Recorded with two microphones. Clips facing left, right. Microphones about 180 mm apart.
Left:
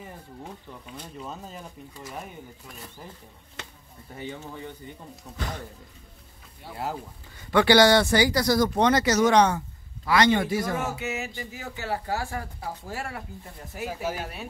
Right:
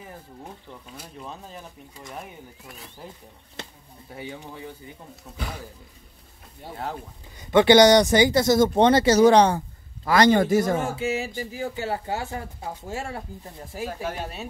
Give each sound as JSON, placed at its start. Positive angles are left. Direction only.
{"t": 0.9, "sound": "speech", "side_deg": -5}
{"t": 4.1, "sound": "speech", "side_deg": -10}
{"t": 7.3, "sound": "a man's voice", "side_deg": -20}
{"t": 11.0, "sound": "speech", "side_deg": -30}